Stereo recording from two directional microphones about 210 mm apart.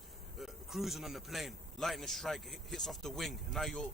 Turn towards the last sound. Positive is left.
turn(degrees=0)  # may be behind; listen again after turning